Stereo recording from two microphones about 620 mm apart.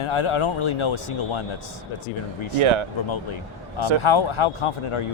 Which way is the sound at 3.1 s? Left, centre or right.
Left.